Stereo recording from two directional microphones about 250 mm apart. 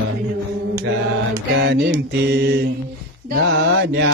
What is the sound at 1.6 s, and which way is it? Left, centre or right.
Mantra, right.